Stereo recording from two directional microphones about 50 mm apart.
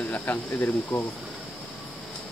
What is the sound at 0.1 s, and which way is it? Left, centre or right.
Speech, left.